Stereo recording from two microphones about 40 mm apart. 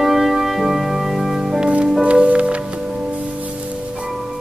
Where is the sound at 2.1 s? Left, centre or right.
Right.